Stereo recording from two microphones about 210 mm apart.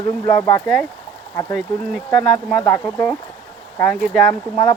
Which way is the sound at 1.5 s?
Centre (ahead or behind).